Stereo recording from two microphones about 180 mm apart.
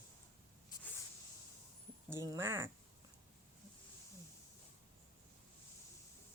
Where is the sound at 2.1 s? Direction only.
15° right (ahead or behind).